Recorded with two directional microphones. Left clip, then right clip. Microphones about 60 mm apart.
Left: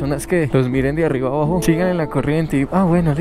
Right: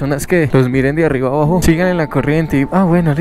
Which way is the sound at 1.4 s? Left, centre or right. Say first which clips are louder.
Right 4 dB; right.